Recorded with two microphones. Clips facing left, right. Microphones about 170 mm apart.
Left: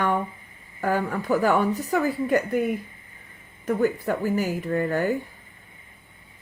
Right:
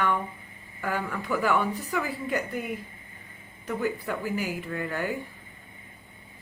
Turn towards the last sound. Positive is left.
turn(degrees=40)  # may be behind; listen again after turning